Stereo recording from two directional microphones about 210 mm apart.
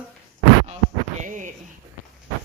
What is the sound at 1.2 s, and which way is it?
Speech, 35° right (ahead or behind).